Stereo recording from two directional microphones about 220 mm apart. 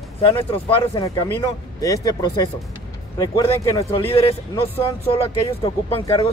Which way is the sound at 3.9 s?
25° left (ahead or behind).